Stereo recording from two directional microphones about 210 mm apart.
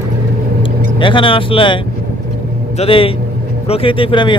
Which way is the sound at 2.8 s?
25° left (ahead or behind).